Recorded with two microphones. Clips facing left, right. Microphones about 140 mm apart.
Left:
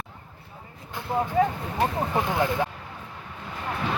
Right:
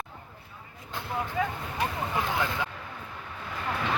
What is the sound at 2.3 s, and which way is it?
Vehicle, 20° left (ahead or behind).